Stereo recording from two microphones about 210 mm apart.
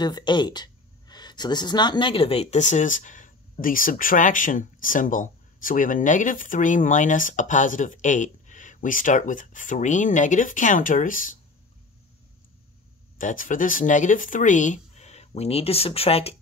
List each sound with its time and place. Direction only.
0.0 s speech: 20° left (ahead or behind); by 11.3 s 40° left (ahead or behind)
13.2 s speech: 40° left (ahead or behind)